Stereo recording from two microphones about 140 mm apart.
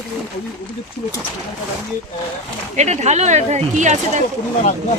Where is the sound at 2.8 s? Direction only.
55° right (ahead or behind).